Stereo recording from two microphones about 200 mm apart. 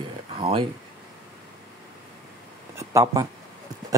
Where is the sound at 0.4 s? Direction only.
25° right (ahead or behind).